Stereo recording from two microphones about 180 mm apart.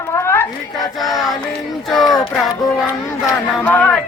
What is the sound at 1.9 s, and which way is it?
Child singing, centre (ahead or behind).